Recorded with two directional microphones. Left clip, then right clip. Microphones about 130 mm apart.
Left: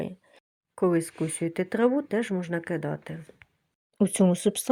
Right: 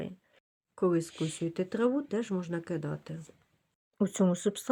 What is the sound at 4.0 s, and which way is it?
Speech, 25° left (ahead or behind).